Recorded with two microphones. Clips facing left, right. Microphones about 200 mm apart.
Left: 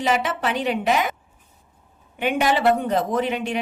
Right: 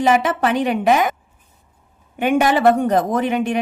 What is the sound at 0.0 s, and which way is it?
Speech, 50° right (ahead or behind).